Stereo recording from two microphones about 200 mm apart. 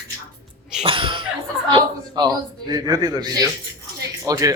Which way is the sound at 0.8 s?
25° right (ahead or behind).